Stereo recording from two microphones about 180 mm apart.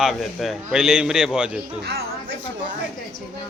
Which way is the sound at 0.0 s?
Centre (ahead or behind).